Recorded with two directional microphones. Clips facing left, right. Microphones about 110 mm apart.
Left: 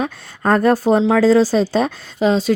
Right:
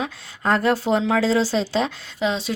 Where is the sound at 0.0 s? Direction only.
45° left (ahead or behind).